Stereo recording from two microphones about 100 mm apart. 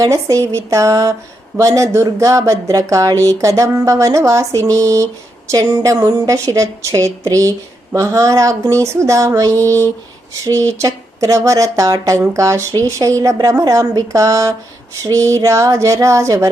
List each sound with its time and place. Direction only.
0.0 s speech: 35° right (ahead or behind)